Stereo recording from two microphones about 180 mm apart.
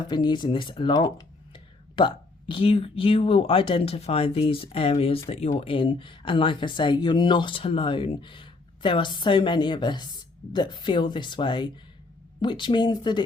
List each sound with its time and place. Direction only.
0.1 s speech: 25° left (ahead or behind)